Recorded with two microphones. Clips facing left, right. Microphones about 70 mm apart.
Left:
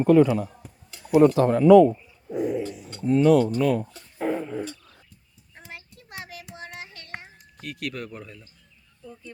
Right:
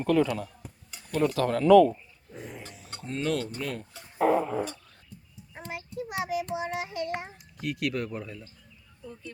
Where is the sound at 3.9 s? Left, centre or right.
Centre.